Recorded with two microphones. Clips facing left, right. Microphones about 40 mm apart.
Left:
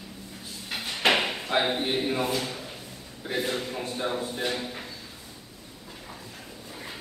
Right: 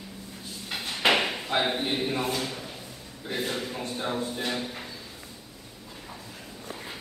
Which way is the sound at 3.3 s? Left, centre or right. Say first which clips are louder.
Left 2 dB; centre.